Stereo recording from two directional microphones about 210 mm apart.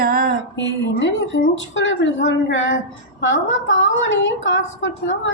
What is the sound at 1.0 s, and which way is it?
A woman's voice, 60° left (ahead or behind).